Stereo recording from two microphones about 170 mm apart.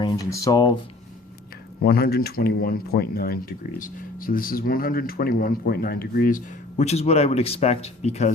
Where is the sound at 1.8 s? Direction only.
65° left (ahead or behind).